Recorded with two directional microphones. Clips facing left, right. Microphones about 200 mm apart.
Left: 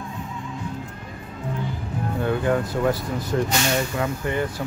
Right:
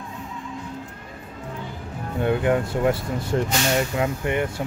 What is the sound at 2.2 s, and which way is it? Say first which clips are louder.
Speech: right 2 dB; 20° right (ahead or behind).